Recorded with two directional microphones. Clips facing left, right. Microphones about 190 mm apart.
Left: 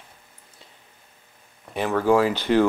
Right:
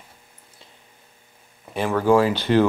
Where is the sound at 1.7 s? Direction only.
Centre (ahead or behind).